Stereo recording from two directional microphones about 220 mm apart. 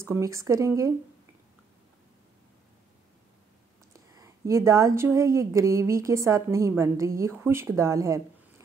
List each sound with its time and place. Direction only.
0.0 s speech: 10° right (ahead or behind)
3.9 s speech: 15° right (ahead or behind)